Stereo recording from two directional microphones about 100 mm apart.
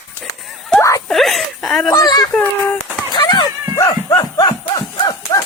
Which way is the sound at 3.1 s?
50° left (ahead or behind).